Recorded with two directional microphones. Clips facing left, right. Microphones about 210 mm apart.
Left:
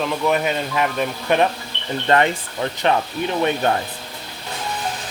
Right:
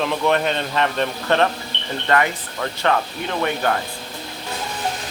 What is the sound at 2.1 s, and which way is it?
Speech, 20° left (ahead or behind).